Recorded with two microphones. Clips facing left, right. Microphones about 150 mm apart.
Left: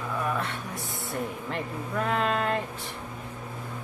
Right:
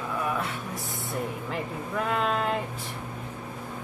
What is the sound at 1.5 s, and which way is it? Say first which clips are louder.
Speech: even; centre (ahead or behind).